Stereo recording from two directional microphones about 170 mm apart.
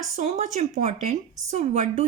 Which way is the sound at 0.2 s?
45° right (ahead or behind).